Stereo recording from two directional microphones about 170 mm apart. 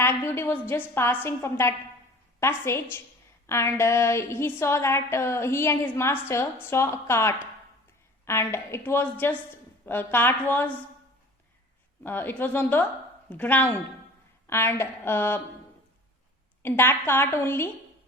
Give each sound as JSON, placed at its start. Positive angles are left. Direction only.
{"t": 0.0, "sound": "a sound", "side_deg": 15}
{"t": 0.7, "sound": "a woman's voice", "side_deg": 15}
{"t": 12.0, "sound": "a woman's voice", "side_deg": 10}
{"t": 16.6, "sound": "a woman's voice", "side_deg": 15}